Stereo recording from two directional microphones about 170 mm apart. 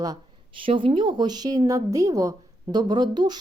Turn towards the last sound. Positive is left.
turn(degrees=-25)  # may be behind; listen again after turning